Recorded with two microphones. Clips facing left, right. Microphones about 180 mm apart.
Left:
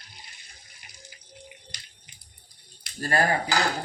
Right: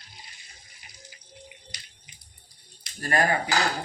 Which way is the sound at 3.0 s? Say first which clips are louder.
Even; 35° left (ahead or behind).